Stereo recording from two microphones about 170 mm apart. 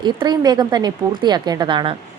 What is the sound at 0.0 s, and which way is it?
A woman's voice, 25° right (ahead or behind).